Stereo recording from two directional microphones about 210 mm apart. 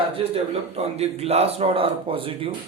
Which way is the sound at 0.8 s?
30° right (ahead or behind).